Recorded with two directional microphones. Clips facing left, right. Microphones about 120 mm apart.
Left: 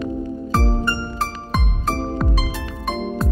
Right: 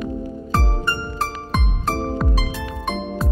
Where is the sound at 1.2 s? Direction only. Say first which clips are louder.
Even; centre (ahead or behind).